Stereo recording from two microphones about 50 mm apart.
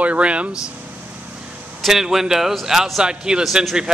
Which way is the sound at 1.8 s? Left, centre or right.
Centre.